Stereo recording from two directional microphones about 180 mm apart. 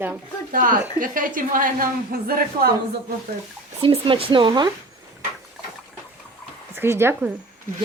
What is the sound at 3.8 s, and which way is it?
Speech, 30° right (ahead or behind).